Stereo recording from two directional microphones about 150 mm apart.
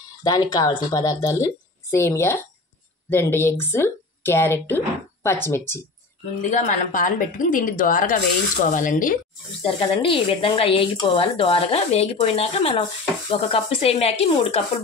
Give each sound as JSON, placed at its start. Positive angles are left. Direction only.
{"t": 0.2, "sound": "speech", "side_deg": 25}
{"t": 6.5, "sound": "a woman's voice", "side_deg": 55}
{"t": 9.6, "sound": "speech", "side_deg": 35}